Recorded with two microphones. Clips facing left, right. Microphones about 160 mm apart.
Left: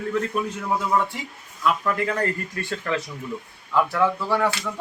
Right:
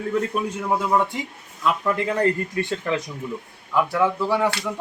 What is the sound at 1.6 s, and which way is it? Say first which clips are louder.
Speech: right 1 dB; 20° right (ahead or behind).